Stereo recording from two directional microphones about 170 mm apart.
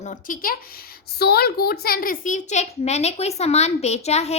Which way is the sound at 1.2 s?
65° left (ahead or behind).